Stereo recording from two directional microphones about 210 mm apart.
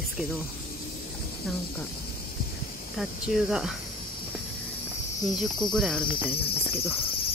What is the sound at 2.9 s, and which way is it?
Cricket, centre (ahead or behind).